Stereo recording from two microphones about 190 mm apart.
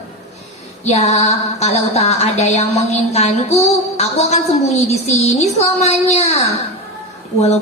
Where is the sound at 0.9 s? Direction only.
35° left (ahead or behind).